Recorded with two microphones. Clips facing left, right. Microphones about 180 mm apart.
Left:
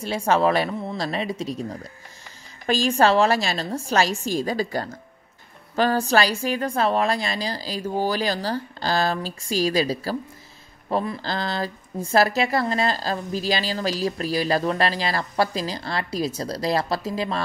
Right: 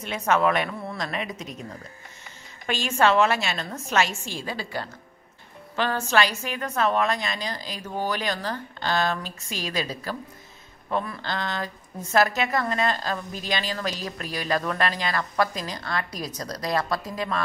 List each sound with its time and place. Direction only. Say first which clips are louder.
0.0 s speech: left 2 dB; 30° left (ahead or behind)